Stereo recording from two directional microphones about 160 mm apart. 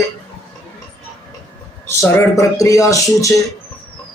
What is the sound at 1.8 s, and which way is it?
Speech, 15° left (ahead or behind).